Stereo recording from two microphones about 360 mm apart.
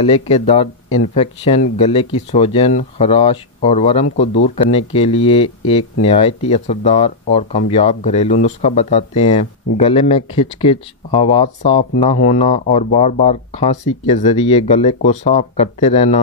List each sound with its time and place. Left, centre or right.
0.0 s speech: centre